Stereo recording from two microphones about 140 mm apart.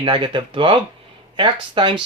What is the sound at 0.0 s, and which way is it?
Speech, 35° right (ahead or behind).